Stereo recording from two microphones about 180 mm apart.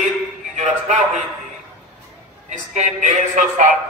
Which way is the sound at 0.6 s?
45° right (ahead or behind).